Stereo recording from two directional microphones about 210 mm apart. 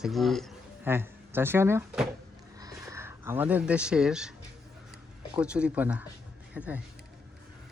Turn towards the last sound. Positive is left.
turn(degrees=-5)  # may be behind; listen again after turning